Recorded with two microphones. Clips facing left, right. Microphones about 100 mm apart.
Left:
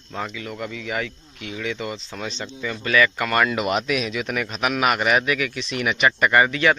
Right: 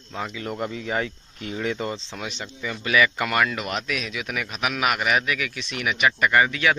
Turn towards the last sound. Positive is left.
turn(degrees=0)  # may be behind; listen again after turning